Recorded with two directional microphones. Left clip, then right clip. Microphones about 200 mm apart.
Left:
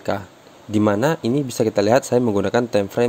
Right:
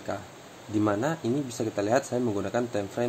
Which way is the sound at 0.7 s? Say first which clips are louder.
Left 8 dB; 50° left (ahead or behind).